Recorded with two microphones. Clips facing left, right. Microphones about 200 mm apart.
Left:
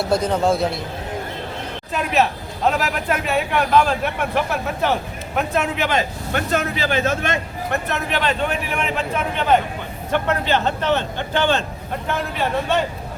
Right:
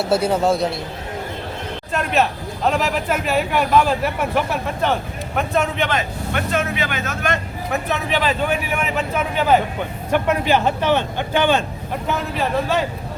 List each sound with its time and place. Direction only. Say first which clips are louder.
0.0 s a man's voice: right 1 dB; 5° right (ahead or behind)
1.9 s a man's voice: even; centre (ahead or behind)
6.3 s speech: even; 40° left (ahead or behind)
7.7 s a man's voice: right 2 dB; centre (ahead or behind)